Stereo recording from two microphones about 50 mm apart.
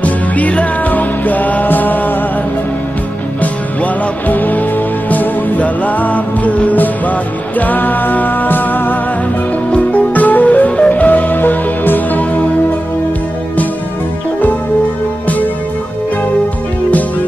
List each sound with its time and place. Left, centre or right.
0.0 s music: left
3.8 s music: left
9.7 s music: left
15.2 s music: left